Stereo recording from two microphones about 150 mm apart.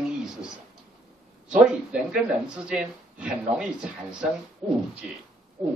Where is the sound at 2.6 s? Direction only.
5° right (ahead or behind).